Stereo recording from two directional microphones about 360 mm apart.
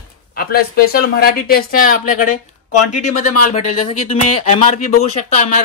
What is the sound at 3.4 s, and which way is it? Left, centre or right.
Speech, centre.